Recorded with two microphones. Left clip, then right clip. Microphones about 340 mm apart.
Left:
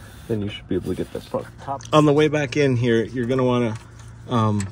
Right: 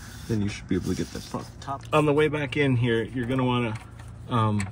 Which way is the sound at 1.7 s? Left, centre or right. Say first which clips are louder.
Left 4 dB; left.